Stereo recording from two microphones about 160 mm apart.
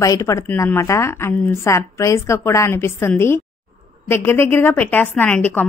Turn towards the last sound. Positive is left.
turn(degrees=10)  # may be behind; listen again after turning